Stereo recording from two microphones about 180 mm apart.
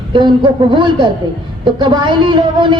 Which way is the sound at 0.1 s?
25° right (ahead or behind).